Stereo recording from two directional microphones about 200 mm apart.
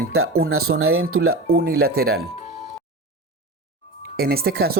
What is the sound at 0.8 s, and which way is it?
Speech, 90° right.